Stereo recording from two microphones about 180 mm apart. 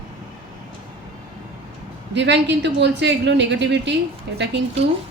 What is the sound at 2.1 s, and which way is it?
A woman's voice, 75° right (ahead or behind).